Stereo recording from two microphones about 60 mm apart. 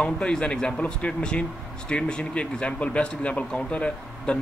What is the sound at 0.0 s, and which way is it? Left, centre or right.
A man's voice, centre.